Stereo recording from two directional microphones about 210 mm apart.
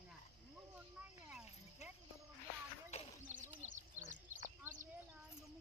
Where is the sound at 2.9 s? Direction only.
30° left (ahead or behind).